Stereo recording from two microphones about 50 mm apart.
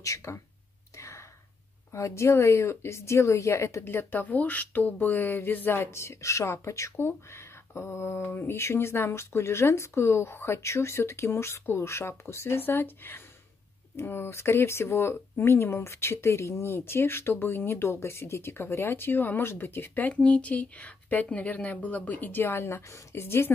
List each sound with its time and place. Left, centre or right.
0.0 s speech: left
0.9 s whispering: left
1.9 s speech: left
3.8 s speech: left
4.2 s speech: left
5.8 s speech: left
7.0 s speech: left
20.2 s speech: left
23.2 s speech: left